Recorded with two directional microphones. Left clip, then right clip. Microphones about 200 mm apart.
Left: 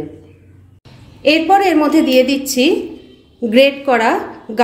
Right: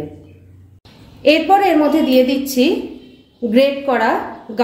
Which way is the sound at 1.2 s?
15° left (ahead or behind).